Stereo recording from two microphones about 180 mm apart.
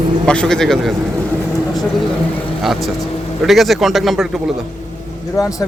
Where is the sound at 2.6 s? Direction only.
Centre (ahead or behind).